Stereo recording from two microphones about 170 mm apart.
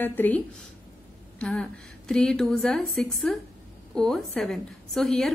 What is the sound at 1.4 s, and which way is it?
A woman's voice, 5° left (ahead or behind).